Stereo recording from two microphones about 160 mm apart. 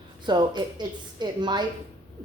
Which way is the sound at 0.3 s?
25° right (ahead or behind).